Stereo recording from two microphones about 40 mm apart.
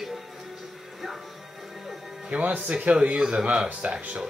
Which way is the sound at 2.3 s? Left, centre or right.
Right.